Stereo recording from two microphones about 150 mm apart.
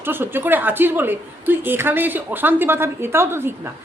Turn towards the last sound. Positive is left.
turn(degrees=-15)  # may be behind; listen again after turning